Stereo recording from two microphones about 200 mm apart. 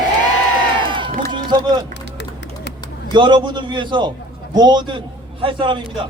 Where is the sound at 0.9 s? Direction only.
25° right (ahead or behind).